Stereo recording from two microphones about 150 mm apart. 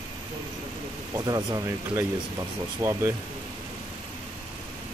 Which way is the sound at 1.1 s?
25° right (ahead or behind).